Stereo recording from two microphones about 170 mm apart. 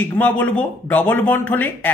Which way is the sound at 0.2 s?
10° left (ahead or behind).